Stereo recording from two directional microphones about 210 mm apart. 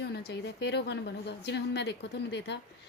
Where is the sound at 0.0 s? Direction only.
50° left (ahead or behind).